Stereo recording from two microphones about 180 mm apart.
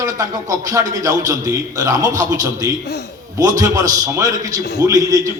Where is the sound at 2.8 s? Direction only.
65° left (ahead or behind).